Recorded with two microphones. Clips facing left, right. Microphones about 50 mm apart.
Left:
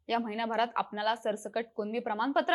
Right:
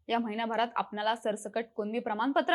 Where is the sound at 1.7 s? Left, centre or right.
Right.